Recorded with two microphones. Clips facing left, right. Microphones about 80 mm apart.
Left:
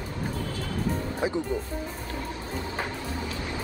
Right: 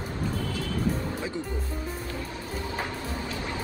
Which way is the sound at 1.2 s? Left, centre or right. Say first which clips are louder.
Left 6 dB; centre.